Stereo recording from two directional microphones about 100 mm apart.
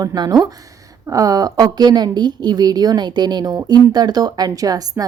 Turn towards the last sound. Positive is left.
turn(degrees=-40)  # may be behind; listen again after turning